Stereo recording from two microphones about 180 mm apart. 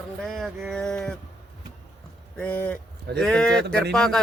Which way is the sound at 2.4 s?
10° left (ahead or behind).